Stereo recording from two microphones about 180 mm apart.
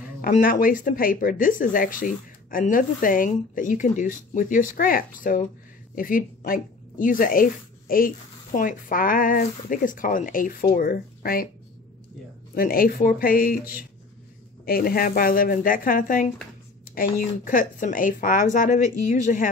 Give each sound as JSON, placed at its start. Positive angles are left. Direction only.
{"t": 0.2, "sound": "speech", "side_deg": 50}
{"t": 12.5, "sound": "speech", "side_deg": 55}
{"t": 14.6, "sound": "speech", "side_deg": 55}